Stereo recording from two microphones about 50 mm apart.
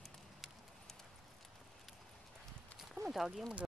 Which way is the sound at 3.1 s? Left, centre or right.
Centre.